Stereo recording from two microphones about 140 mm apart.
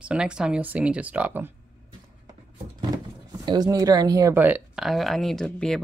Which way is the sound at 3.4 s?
30° right (ahead or behind).